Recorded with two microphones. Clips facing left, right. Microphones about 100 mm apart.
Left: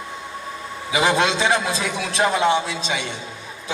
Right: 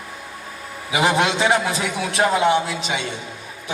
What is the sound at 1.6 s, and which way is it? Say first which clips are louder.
Speech: right 1 dB; 20° right (ahead or behind).